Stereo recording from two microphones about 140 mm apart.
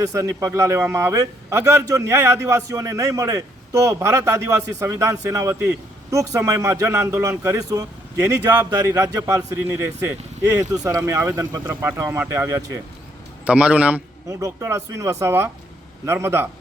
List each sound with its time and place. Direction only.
0.1 s a man's voice: 20° right (ahead or behind)
14.3 s a man's voice: 20° right (ahead or behind)